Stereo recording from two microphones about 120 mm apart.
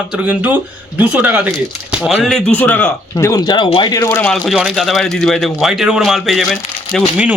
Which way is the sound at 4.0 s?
25° left (ahead or behind).